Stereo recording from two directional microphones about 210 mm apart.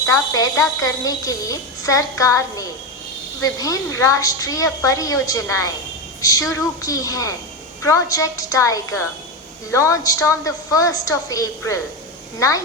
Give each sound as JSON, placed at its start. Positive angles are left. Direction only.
{"t": 0.0, "sound": "a woman's voice", "side_deg": 15}